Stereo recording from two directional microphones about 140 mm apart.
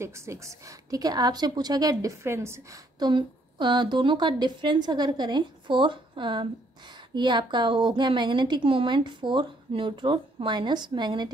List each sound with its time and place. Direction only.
0.0 s a woman's voice: 20° right (ahead or behind)
3.0 s a woman's voice: 35° right (ahead or behind)